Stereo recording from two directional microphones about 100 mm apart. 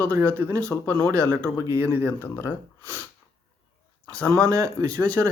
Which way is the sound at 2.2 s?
25° left (ahead or behind).